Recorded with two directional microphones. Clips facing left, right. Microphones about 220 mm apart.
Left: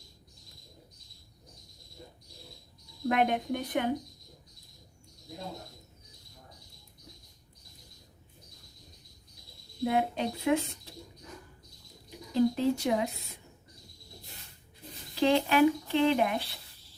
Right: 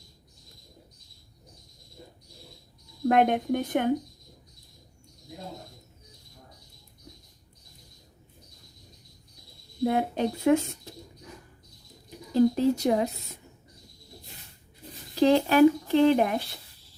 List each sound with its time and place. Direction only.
3.1 s speech: 45° right (ahead or behind)
9.8 s speech: 45° right (ahead or behind)
12.3 s speech: 40° right (ahead or behind)
15.2 s speech: 40° right (ahead or behind)